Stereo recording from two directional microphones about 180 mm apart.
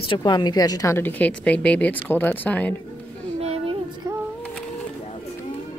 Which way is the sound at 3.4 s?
35° right (ahead or behind).